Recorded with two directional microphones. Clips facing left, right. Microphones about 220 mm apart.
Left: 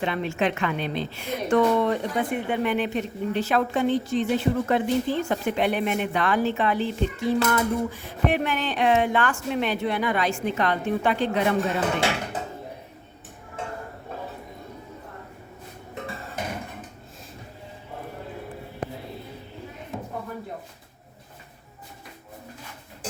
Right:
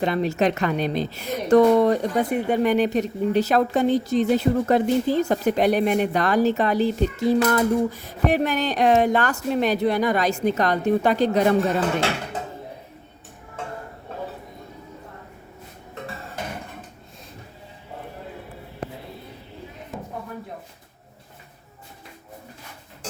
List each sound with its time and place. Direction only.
0.0 s a woman's voice: 40° right (ahead or behind)